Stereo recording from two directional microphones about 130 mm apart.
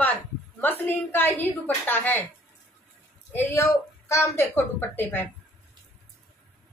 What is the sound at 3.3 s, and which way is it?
A woman's voice, 20° left (ahead or behind).